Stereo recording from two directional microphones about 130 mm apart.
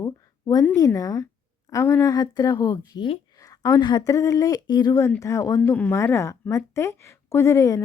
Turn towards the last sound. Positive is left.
turn(degrees=25)  # may be behind; listen again after turning